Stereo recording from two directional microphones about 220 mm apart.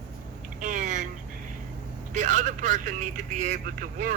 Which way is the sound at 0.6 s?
35° right (ahead or behind).